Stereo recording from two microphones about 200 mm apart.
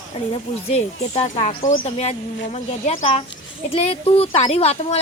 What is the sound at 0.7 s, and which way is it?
Speech, 30° left (ahead or behind).